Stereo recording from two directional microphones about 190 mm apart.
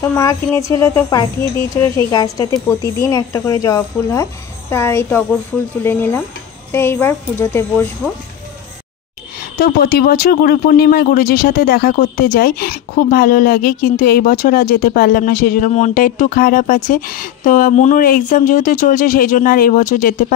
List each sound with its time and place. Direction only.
0.0 s speech: 15° left (ahead or behind)
9.6 s speech: 55° left (ahead or behind)